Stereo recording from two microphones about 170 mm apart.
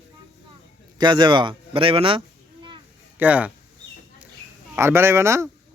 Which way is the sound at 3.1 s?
10° right (ahead or behind).